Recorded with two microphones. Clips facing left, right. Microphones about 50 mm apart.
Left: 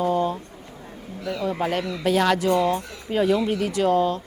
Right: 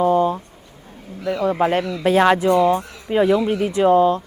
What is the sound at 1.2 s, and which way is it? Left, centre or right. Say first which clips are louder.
Speech: right 7 dB; right.